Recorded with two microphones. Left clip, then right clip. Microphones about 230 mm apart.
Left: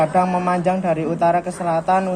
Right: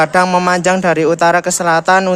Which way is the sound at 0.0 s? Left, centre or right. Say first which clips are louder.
Right 6 dB; right.